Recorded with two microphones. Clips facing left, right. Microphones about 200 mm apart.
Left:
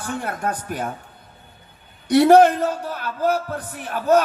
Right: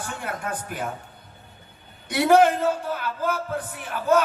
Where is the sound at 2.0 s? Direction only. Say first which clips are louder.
Left 5 dB; 40° left (ahead or behind).